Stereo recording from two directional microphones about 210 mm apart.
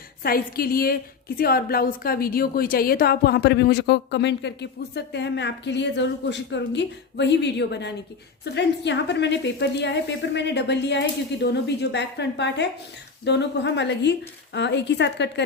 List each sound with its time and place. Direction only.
0.2 s a woman's voice: 45° left (ahead or behind)